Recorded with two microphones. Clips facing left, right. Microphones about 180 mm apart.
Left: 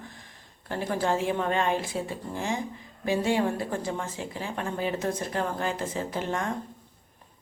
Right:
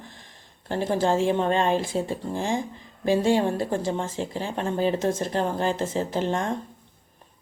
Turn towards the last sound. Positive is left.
turn(degrees=-30)  # may be behind; listen again after turning